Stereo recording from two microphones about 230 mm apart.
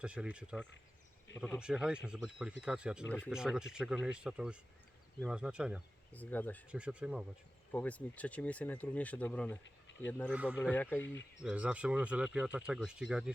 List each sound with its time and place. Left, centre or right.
0.0 s speech: centre
6.1 s speech: centre
6.7 s speech: centre
7.7 s speech: centre
9.6 s a sound: left
10.1 s speech: centre
10.3 s speech: centre
10.6 s speech: centre
11.4 s speech: centre